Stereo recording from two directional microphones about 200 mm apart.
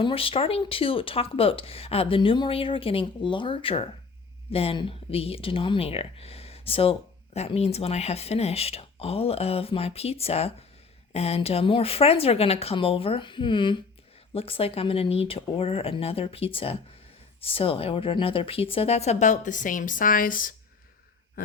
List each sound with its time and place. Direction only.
0.0 s a woman's voice: 25° left (ahead or behind); by 20.5 s 45° left (ahead or behind)